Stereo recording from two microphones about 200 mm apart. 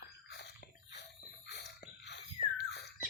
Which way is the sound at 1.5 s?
55° left (ahead or behind).